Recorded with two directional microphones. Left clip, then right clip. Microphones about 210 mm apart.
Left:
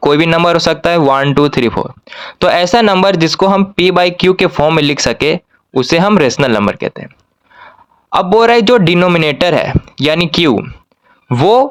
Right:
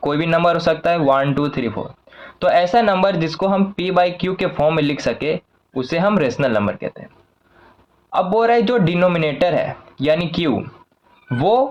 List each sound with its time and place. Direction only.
0.0 s speech: 45° left (ahead or behind)
8.4 s speech: 40° left (ahead or behind)
11.3 s speech: 45° left (ahead or behind)